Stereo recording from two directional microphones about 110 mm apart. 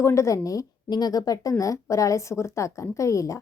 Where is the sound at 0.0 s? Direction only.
25° left (ahead or behind).